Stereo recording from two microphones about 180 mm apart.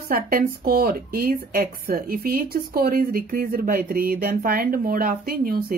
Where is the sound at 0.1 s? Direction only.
55° right (ahead or behind).